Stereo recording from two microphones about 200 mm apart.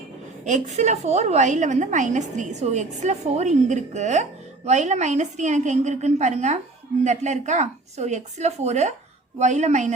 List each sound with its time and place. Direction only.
0.4 s a woman's voice: 35° right (ahead or behind)